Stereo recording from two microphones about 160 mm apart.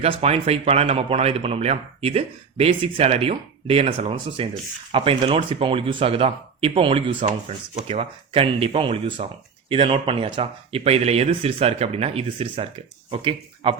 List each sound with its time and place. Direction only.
0.0 s speech: 40° right (ahead or behind)